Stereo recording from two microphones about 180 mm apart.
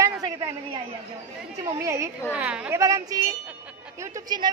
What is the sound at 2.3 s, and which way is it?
Speech, 5° right (ahead or behind).